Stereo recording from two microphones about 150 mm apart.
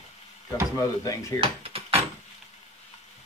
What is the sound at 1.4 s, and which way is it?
Mechanisms, 40° right (ahead or behind).